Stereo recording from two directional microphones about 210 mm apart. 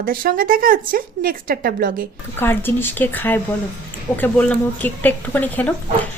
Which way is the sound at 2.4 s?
10° left (ahead or behind).